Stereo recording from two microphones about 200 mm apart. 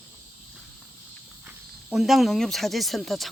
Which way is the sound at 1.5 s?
Centre (ahead or behind).